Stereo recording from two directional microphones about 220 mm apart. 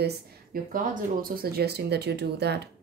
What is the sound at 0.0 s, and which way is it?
Speech, 40° right (ahead or behind).